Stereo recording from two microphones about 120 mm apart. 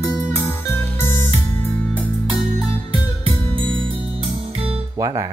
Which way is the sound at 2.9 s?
45° right (ahead or behind).